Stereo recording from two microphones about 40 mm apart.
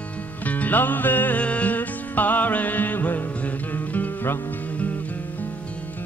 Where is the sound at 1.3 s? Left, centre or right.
Left.